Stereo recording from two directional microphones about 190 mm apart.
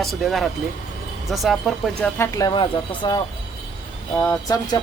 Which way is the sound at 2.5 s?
25° left (ahead or behind).